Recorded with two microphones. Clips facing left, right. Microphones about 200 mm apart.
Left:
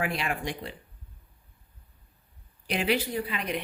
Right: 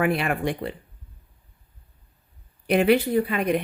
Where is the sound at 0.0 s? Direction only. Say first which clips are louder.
Right 8 dB; 55° right (ahead or behind).